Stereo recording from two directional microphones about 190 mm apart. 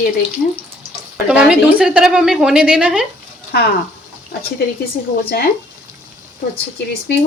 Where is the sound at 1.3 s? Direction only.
5° right (ahead or behind).